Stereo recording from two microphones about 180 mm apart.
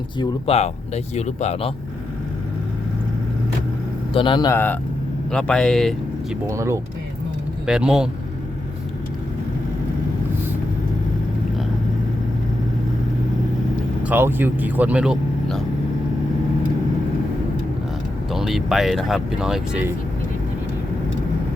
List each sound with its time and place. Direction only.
0.2 s speech: 35° left (ahead or behind)
4.1 s a man's voice: 25° left (ahead or behind); by 5.9 s 5° left (ahead or behind)
6.5 s speech: 15° right (ahead or behind)
7.7 s speech: 5° right (ahead or behind)
14.0 s speech: 10° right (ahead or behind)
18.3 s speech: centre (ahead or behind)